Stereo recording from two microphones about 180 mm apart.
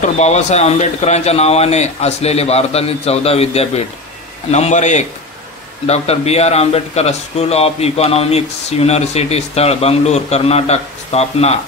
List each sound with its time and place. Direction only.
0.2 s a man's voice: 40° left (ahead or behind)